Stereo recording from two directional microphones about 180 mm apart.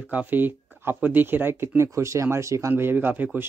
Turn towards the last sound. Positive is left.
turn(degrees=-10)  # may be behind; listen again after turning